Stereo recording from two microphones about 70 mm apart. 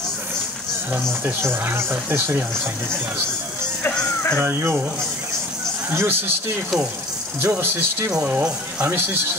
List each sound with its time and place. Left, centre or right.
1.2 s speech: right
4.4 s speech: right
5.9 s speech: right
7.4 s speech: right